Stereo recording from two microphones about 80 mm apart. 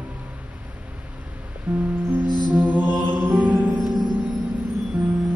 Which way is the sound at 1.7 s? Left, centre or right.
Centre.